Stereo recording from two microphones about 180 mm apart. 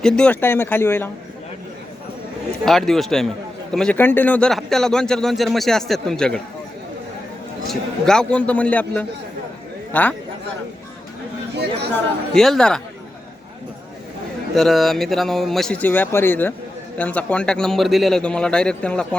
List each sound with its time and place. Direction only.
0.0 s a man's voice: 5° left (ahead or behind)
2.6 s speech: centre (ahead or behind)
7.7 s a man's voice: 5° left (ahead or behind)
12.3 s speech: centre (ahead or behind)
14.5 s speech: centre (ahead or behind)